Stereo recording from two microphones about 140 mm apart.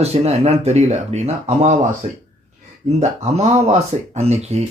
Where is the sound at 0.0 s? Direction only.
50° right (ahead or behind).